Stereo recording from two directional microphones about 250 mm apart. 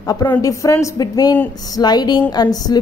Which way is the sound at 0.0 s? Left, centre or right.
Centre.